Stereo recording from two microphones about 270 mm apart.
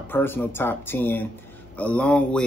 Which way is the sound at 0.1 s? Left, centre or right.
Centre.